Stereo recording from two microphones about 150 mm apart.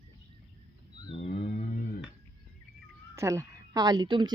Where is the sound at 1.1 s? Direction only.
40° left (ahead or behind).